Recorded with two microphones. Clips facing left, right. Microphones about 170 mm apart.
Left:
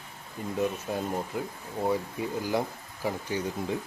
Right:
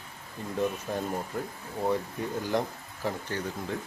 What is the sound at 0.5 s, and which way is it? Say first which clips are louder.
Speech: even; 5° left (ahead or behind).